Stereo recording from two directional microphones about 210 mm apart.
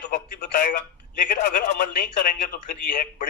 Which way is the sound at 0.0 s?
45° left (ahead or behind).